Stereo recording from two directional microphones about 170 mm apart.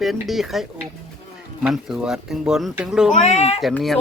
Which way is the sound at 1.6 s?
5° right (ahead or behind).